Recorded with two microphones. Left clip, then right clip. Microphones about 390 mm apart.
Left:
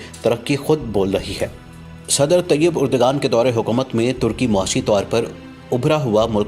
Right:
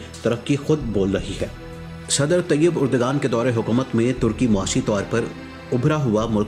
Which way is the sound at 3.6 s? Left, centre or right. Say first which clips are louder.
Left 3 dB; left.